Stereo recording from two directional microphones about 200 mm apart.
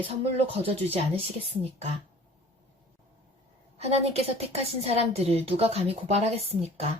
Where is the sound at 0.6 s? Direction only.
30° right (ahead or behind).